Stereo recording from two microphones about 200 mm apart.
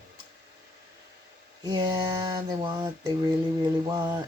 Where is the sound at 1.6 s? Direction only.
20° right (ahead or behind).